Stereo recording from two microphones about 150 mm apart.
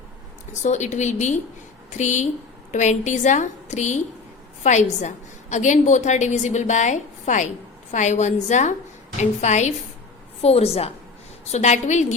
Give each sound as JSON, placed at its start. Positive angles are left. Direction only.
{"t": 0.5, "sound": "a woman's voice", "side_deg": 50}